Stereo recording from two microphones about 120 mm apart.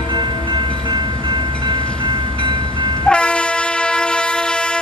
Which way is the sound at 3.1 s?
10° left (ahead or behind).